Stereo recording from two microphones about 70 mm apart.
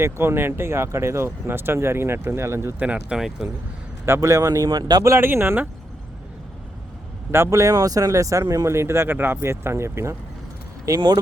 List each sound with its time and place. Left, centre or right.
0.0 s speech: right
2.7 s speech: centre
3.2 s speech: centre
4.0 s speech: right
5.0 s speech: right
7.3 s speech: right
10.8 s speech: right